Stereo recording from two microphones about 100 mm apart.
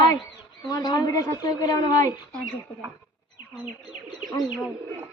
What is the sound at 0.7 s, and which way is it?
Speech, 45° left (ahead or behind).